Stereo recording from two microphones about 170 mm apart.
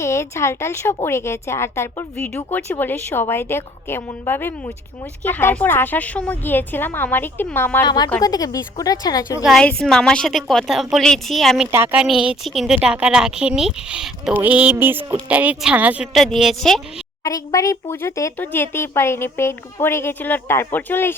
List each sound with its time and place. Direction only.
0.0 s speech: 15° left (ahead or behind)
7.9 s speech: 25° left (ahead or behind)
9.4 s a woman's voice: centre (ahead or behind)
11.7 s a woman's voice: 10° right (ahead or behind)
17.2 s speech: 20° left (ahead or behind)